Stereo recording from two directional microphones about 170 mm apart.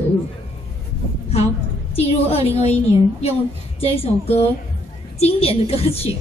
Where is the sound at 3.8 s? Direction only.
35° left (ahead or behind).